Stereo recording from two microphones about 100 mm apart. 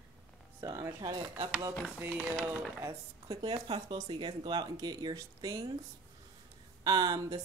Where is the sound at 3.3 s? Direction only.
50° right (ahead or behind); by 5.7 s 35° right (ahead or behind).